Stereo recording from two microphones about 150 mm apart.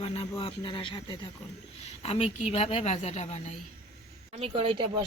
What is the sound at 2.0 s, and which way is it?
A woman's voice, 45° left (ahead or behind).